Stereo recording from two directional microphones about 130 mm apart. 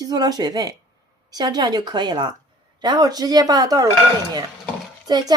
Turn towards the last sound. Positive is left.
turn(degrees=-30)  # may be behind; listen again after turning